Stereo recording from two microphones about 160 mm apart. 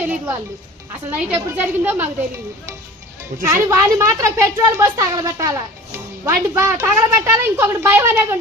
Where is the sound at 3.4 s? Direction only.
15° right (ahead or behind).